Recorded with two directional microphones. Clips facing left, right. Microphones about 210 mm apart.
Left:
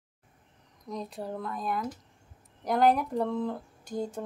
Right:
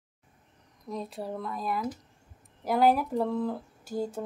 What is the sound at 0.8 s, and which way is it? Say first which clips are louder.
Speech: right 1 dB; centre (ahead or behind).